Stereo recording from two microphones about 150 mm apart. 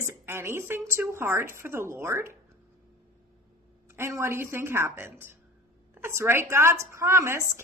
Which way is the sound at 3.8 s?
15° right (ahead or behind).